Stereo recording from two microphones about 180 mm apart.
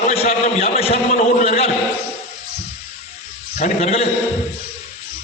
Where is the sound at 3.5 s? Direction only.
40° left (ahead or behind).